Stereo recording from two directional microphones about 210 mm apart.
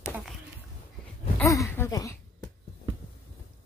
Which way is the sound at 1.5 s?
15° left (ahead or behind).